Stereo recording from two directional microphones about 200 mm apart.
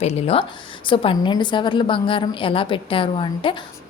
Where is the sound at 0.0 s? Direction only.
30° left (ahead or behind).